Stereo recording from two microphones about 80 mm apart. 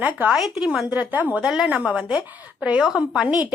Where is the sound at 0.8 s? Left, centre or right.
Centre.